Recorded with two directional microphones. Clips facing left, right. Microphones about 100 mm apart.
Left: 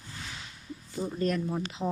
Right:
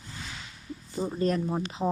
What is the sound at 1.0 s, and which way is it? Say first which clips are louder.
Speech: right 2 dB; 30° right (ahead or behind).